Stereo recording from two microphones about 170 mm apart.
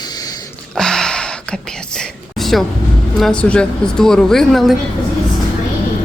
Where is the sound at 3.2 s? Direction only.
5° left (ahead or behind).